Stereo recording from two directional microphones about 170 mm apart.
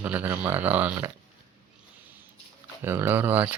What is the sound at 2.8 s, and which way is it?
Speech, 15° right (ahead or behind).